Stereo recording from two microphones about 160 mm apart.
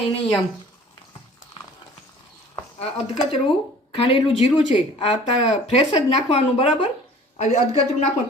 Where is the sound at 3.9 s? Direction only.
40° left (ahead or behind).